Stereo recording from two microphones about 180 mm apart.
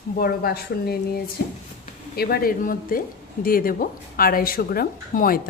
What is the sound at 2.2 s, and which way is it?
A woman's voice, 55° left (ahead or behind).